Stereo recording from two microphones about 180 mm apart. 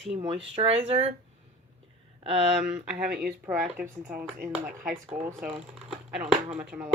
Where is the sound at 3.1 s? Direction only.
55° right (ahead or behind).